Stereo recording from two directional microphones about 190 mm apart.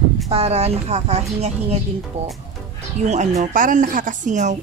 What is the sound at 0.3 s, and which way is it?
A woman's voice, 35° right (ahead or behind).